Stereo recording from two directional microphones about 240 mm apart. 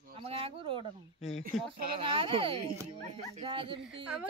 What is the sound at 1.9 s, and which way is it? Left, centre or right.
Speech, right.